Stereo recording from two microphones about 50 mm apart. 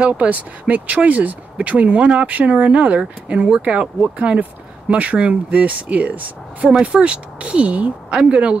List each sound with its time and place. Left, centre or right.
0.0 s speech: right